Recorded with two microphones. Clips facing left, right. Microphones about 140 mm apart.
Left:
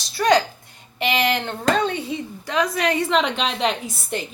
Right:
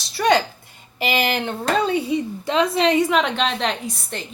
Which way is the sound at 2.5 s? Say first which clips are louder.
Right 3 dB; 25° right (ahead or behind).